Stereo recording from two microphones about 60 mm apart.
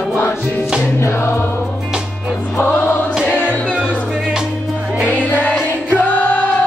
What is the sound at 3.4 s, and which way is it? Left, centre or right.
Music, left.